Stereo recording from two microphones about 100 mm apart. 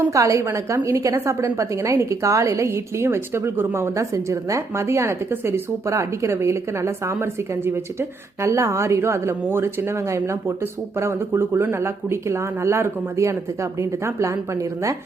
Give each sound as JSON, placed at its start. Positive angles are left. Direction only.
{"t": 0.1, "sound": "a woman's voice", "side_deg": -30}